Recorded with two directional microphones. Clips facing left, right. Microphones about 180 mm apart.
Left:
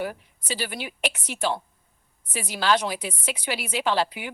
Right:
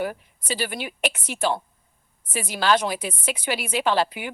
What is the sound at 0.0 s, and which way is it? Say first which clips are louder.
Speech: right 3 dB; 50° right (ahead or behind).